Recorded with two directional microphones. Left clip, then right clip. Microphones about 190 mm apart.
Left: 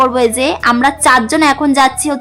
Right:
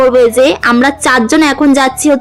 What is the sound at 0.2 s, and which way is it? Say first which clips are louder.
A woman's voice: right 5 dB; 10° right (ahead or behind).